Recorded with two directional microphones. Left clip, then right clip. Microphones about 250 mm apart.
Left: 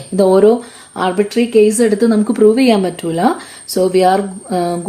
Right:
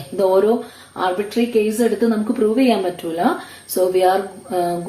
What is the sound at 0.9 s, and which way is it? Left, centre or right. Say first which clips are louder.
Speech: left 5 dB; left.